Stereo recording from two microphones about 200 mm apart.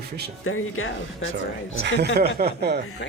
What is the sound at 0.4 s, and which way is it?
Speech, 90° left.